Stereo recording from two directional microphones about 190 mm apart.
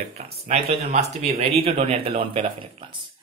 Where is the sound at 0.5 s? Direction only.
35° right (ahead or behind).